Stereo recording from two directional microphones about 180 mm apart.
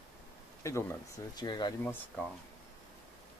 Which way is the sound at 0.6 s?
15° left (ahead or behind).